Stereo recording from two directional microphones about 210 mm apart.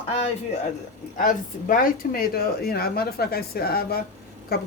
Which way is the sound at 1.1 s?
40° left (ahead or behind).